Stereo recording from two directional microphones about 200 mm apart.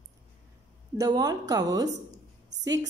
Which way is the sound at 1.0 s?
20° right (ahead or behind).